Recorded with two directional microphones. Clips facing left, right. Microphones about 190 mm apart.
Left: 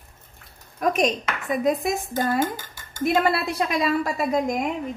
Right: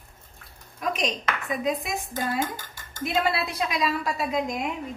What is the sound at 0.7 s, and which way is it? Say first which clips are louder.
A woman's voice: left 6 dB; 50° left (ahead or behind).